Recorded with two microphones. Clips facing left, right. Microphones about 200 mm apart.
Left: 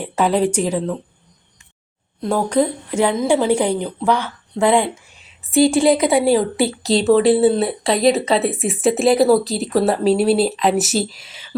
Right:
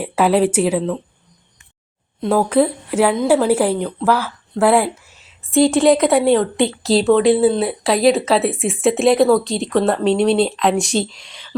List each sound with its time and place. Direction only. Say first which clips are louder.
0.0 s a woman's voice: right 2 dB; 5° right (ahead or behind)
2.2 s speech: right 2 dB; 5° right (ahead or behind)